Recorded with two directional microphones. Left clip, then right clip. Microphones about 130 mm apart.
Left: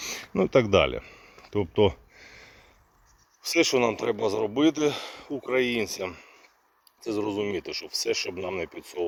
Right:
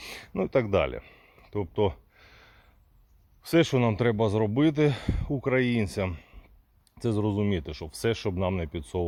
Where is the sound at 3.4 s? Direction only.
15° left (ahead or behind).